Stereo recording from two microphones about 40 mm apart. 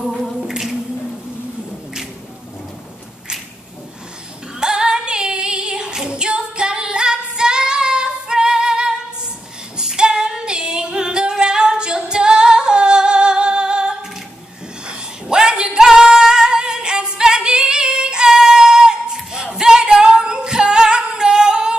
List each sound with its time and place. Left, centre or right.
0.0 s a capella: centre
4.6 s female singing: centre
14.9 s singing: centre